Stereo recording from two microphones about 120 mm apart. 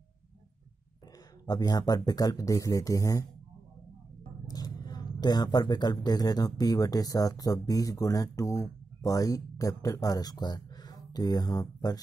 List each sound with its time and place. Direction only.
1.4 s speech: 35° left (ahead or behind)
4.5 s speech: 35° left (ahead or behind)